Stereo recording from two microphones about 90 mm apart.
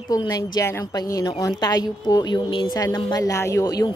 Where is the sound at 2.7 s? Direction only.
45° left (ahead or behind).